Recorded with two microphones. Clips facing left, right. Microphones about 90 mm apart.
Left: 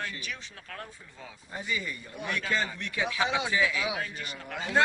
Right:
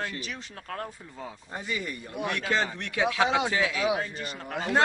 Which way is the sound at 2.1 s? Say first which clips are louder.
Right 4 dB; 65° right (ahead or behind).